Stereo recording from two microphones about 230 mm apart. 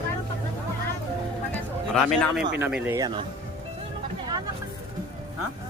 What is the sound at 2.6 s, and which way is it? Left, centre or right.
Speech, centre.